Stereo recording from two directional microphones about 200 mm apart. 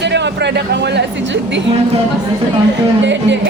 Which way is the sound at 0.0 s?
60° right (ahead or behind).